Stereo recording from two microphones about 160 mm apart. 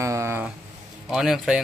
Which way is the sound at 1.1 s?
Centre (ahead or behind).